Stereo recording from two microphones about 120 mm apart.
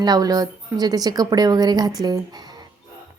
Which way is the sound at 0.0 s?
30° right (ahead or behind).